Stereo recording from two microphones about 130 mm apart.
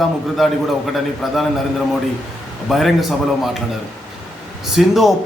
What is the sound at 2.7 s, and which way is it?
Speech, centre (ahead or behind).